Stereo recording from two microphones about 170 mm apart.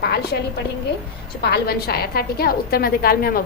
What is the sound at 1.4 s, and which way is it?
A woman's voice, 75° left (ahead or behind).